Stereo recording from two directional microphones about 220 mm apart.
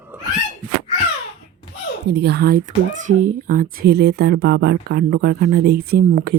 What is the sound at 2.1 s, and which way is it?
A child's voice, 50° right (ahead or behind).